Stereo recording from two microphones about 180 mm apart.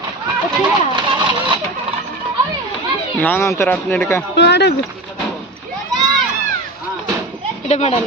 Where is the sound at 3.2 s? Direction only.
10° left (ahead or behind).